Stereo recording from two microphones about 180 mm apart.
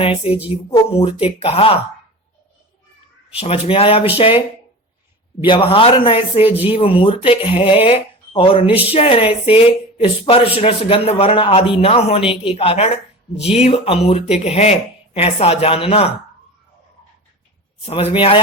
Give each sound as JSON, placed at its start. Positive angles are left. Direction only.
{"t": 0.0, "sound": "a man's voice", "side_deg": 30}
{"t": 3.3, "sound": "a man's voice", "side_deg": 35}
{"t": 17.8, "sound": "a man's voice", "side_deg": 30}